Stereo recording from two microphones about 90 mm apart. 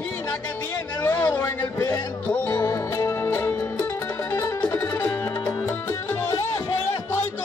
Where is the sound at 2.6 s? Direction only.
40° left (ahead or behind).